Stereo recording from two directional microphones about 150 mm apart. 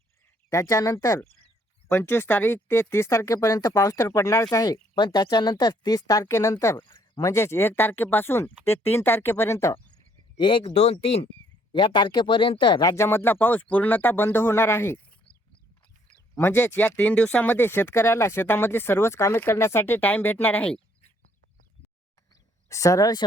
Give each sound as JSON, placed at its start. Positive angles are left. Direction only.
{"t": 0.5, "sound": "speech", "side_deg": 20}
{"t": 10.3, "sound": "speech", "side_deg": 35}
{"t": 16.3, "sound": "speech", "side_deg": 15}
{"t": 22.7, "sound": "speech", "side_deg": 20}